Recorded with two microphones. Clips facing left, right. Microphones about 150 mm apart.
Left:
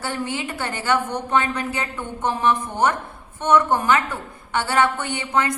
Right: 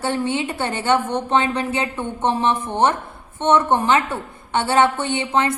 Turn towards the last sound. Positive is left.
turn(degrees=-25)  # may be behind; listen again after turning